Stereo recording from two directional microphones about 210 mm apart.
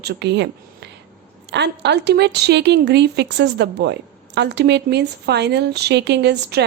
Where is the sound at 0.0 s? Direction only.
50° right (ahead or behind).